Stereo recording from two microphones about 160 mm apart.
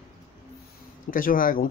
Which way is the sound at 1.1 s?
60° left (ahead or behind).